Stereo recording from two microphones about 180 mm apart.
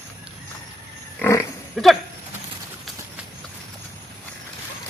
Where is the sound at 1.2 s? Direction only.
15° left (ahead or behind).